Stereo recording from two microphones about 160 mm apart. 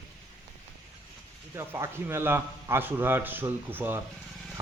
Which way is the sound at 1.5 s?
15° right (ahead or behind).